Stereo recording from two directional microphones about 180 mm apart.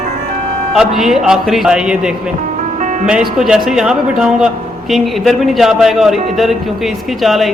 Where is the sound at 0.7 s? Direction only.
Centre (ahead or behind).